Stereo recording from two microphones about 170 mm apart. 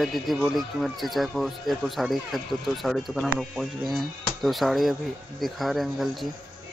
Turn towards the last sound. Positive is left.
turn(degrees=0)  # may be behind; listen again after turning